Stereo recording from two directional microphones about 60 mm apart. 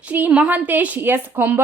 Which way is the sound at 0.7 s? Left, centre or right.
Right.